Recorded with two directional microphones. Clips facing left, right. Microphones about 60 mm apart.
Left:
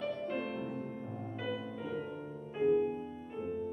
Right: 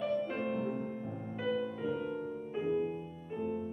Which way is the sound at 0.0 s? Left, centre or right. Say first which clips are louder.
Right 3 dB; centre.